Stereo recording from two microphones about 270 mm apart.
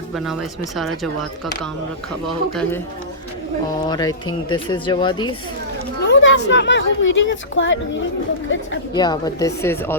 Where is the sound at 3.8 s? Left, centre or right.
Centre.